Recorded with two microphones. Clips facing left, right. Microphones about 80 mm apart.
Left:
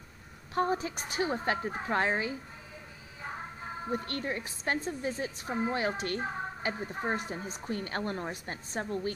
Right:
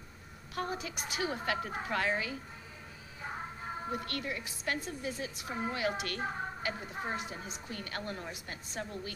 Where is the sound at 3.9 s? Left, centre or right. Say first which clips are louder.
Left 5 dB; left.